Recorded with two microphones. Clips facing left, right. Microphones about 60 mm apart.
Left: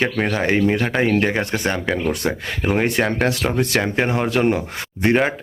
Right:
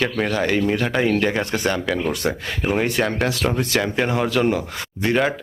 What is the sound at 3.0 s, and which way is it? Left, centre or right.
Speech, left.